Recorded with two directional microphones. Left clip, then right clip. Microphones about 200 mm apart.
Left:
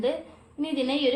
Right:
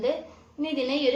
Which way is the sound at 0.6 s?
40° left (ahead or behind).